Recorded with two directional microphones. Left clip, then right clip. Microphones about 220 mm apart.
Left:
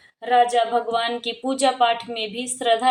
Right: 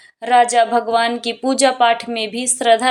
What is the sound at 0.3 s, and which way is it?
Speech, 30° right (ahead or behind).